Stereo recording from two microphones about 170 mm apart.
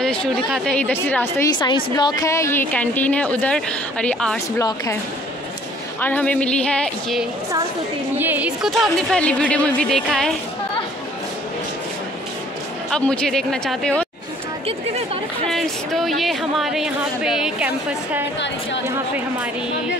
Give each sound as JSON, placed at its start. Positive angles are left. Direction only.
{"t": 0.0, "sound": "a woman's voice", "side_deg": 5}
{"t": 2.0, "sound": "a woman's voice", "side_deg": 25}
{"t": 4.6, "sound": "speech", "side_deg": 20}
{"t": 5.9, "sound": "a woman's voice", "side_deg": 10}
{"t": 8.2, "sound": "speech", "side_deg": -10}
{"t": 12.9, "sound": "speech", "side_deg": 5}
{"t": 15.5, "sound": "speech", "side_deg": 0}